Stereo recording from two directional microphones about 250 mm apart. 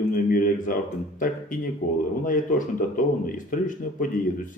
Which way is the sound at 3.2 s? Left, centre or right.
Left.